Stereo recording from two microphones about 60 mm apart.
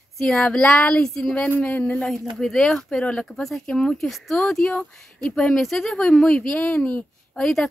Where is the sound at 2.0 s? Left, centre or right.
Centre.